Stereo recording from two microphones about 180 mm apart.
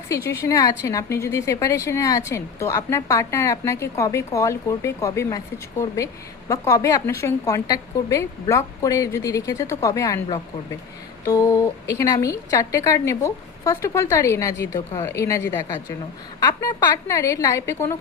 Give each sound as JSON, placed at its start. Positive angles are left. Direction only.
{"t": 0.1, "sound": "a woman's voice", "side_deg": 15}
{"t": 6.5, "sound": "a woman's voice", "side_deg": 20}
{"t": 11.3, "sound": "a woman's voice", "side_deg": 15}